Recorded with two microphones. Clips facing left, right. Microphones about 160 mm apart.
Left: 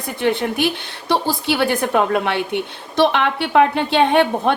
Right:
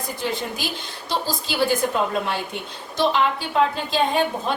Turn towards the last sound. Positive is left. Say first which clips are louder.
# left 6 dB
turn(degrees=65)  # may be behind; listen again after turning